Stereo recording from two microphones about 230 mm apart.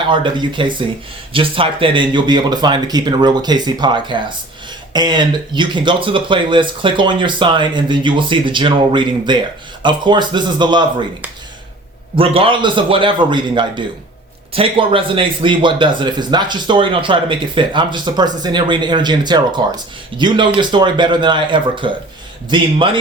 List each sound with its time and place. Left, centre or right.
0.1 s speech: right
12.1 s speech: right